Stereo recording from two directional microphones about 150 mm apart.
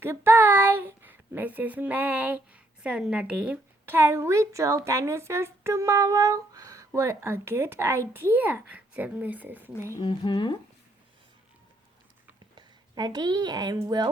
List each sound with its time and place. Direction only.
0.0 s a child's voice: 15° right (ahead or behind)
9.7 s speech: 20° left (ahead or behind)
10.0 s speech: 30° left (ahead or behind)
12.5 s speech: 30° right (ahead or behind)